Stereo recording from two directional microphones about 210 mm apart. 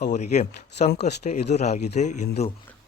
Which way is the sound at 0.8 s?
50° left (ahead or behind).